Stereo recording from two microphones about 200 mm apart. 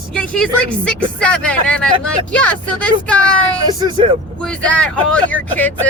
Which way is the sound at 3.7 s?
20° right (ahead or behind).